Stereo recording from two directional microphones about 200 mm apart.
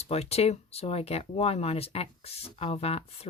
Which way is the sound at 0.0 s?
30° left (ahead or behind).